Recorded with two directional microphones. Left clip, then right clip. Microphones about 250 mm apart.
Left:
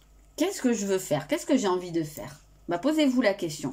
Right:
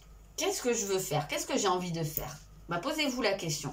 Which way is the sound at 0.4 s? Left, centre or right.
Left.